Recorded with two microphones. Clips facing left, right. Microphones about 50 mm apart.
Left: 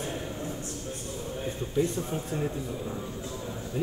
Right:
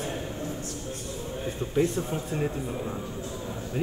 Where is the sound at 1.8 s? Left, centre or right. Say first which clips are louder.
Right 2 dB; right.